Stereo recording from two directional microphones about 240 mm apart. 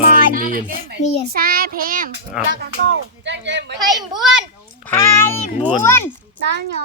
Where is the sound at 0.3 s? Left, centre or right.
Right.